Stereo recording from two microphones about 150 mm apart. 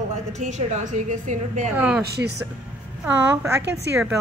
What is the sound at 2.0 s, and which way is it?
Speech, 90° right.